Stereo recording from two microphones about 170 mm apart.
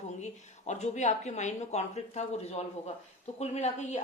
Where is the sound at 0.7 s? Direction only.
45° left (ahead or behind).